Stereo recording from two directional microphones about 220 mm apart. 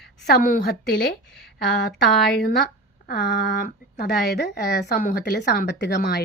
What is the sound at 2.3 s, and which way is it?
Speech, 45° left (ahead or behind).